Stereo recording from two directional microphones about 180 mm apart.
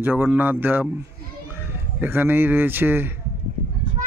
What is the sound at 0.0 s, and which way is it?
Speech, 10° right (ahead or behind).